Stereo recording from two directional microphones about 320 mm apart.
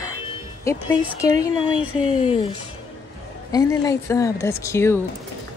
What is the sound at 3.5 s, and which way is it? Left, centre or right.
A woman's voice, centre.